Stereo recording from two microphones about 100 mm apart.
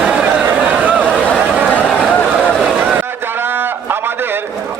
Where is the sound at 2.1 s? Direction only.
10° left (ahead or behind).